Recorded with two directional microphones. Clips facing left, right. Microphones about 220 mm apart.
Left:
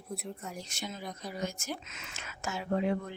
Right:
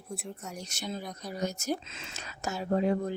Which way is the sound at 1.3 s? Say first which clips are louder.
Right 7 dB; 40° right (ahead or behind).